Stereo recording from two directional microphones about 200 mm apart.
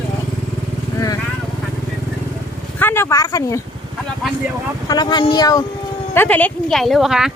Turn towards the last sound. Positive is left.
turn(degrees=0)  # may be behind; listen again after turning